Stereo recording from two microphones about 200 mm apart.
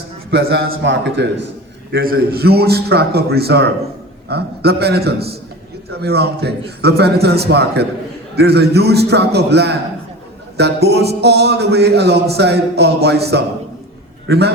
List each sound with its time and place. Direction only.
0.3 s speech: 60° right (ahead or behind)
1.9 s a man's voice: 50° right (ahead or behind)